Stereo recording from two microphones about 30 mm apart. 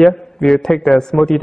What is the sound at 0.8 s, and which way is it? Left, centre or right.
Mantra, centre.